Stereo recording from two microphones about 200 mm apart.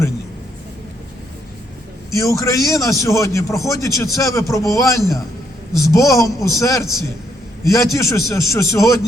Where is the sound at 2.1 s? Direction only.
15° left (ahead or behind).